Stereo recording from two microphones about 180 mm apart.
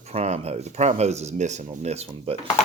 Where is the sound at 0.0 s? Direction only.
35° right (ahead or behind).